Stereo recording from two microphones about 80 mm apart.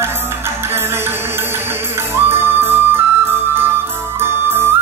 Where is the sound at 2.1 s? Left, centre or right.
Right.